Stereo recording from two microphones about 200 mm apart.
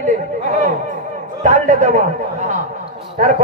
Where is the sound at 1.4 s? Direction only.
40° right (ahead or behind).